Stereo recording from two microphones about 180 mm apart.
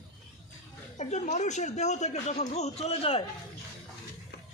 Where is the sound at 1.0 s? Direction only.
40° left (ahead or behind).